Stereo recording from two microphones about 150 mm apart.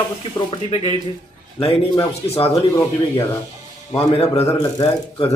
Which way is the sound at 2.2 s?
40° left (ahead or behind).